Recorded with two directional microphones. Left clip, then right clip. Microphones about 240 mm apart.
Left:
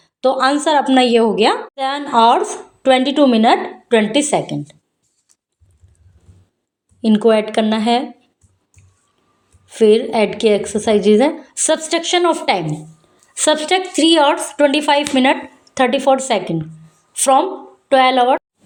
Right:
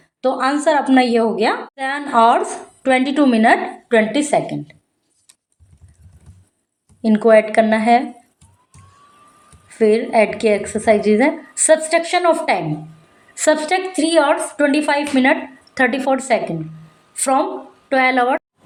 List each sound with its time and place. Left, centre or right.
0.0 s a woman's voice: left
7.0 s a woman's voice: left
9.6 s a woman's voice: left